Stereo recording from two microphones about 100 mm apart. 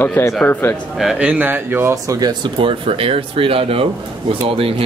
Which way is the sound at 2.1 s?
40° right (ahead or behind).